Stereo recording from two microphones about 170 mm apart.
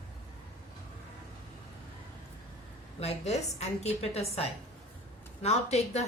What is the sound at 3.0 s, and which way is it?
A woman's voice, 40° left (ahead or behind).